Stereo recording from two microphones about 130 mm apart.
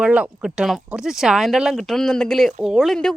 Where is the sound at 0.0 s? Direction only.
10° right (ahead or behind).